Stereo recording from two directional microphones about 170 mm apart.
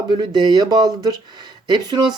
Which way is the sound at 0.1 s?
25° right (ahead or behind).